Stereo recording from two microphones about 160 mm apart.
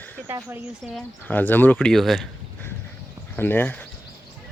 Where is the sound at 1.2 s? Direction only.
10° left (ahead or behind).